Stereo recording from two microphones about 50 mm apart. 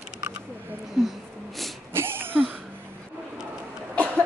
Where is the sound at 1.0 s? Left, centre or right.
Centre.